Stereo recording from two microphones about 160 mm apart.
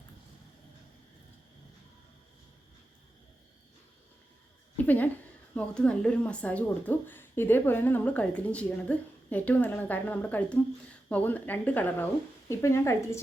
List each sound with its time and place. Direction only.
5.5 s speech: 5° left (ahead or behind)